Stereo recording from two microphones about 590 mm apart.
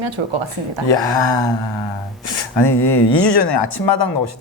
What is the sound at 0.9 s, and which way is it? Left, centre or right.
Speech, left.